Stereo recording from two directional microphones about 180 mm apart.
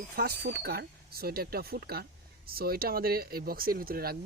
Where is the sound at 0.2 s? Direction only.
65° right (ahead or behind).